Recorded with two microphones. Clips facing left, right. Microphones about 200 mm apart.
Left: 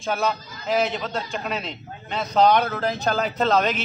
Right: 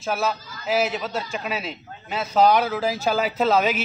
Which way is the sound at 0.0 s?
5° right (ahead or behind).